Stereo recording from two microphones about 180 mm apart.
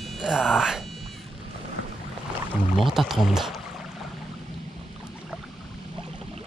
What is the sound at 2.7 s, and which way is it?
Speech, centre (ahead or behind).